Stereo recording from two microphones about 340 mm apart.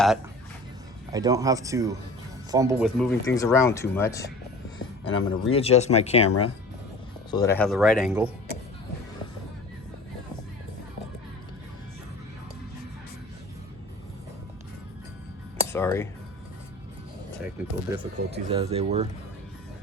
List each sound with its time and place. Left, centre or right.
1.1 s speech: centre
3.0 s speech: centre
15.7 s speech: centre
17.4 s speech: centre
18.3 s speech: centre